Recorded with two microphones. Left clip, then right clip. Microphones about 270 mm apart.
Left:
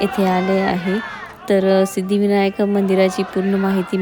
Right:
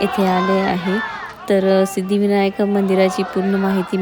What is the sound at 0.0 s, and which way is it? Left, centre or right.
Speech, centre.